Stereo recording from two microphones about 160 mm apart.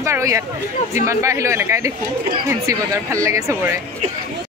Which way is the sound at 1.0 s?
20° right (ahead or behind).